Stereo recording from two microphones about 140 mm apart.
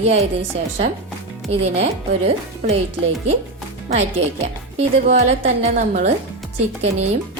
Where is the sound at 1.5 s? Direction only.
45° right (ahead or behind).